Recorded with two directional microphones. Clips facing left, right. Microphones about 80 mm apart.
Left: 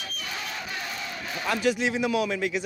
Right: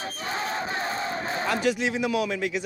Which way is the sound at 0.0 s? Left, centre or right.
Right.